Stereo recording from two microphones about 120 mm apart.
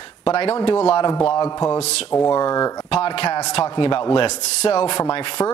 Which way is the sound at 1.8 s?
65° left (ahead or behind).